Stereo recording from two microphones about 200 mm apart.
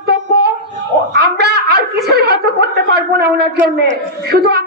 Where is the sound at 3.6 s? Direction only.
55° right (ahead or behind).